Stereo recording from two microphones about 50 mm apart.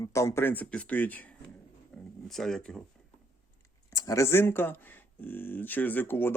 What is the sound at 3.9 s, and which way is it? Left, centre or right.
Speech, left.